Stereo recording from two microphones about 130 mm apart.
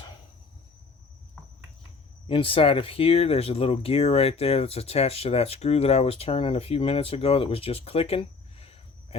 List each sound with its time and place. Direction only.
2.2 s speech: 45° left (ahead or behind)